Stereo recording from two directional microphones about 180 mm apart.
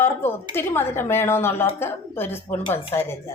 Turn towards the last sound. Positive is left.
turn(degrees=10)  # may be behind; listen again after turning